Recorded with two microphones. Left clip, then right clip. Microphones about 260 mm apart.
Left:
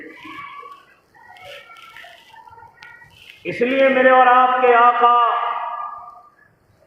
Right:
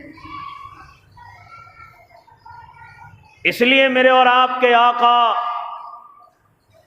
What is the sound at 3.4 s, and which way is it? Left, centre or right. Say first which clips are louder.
A man's voice: right 3 dB; right.